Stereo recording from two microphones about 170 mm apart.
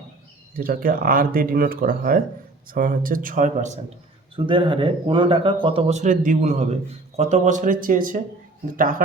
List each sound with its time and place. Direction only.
0.5 s a man's voice: 55° right (ahead or behind)
4.4 s a man's voice: 30° right (ahead or behind); by 9.0 s 55° right (ahead or behind)